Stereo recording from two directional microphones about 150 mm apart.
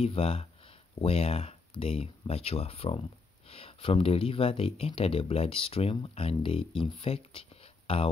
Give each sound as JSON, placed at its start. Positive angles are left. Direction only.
{"t": 0.0, "sound": "speech", "side_deg": 40}